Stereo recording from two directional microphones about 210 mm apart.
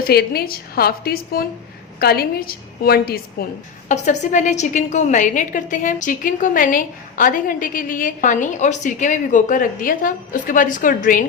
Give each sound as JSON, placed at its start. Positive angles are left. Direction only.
{"t": 0.0, "sound": "a woman's voice", "side_deg": 45}
{"t": 3.8, "sound": "a woman's voice", "side_deg": 35}